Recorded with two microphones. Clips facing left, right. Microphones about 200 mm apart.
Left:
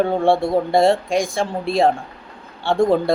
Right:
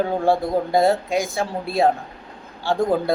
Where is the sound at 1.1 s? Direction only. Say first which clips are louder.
Left 2 dB; 5° right (ahead or behind).